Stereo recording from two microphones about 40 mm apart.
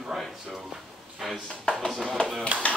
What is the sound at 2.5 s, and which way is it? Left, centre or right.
Speech, right.